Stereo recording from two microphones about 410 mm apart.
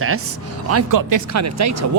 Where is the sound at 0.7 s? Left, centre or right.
Right.